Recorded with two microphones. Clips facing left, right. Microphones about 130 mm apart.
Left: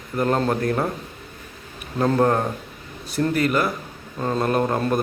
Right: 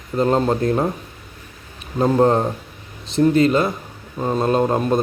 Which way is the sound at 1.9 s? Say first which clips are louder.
Right 3 dB; 20° right (ahead or behind).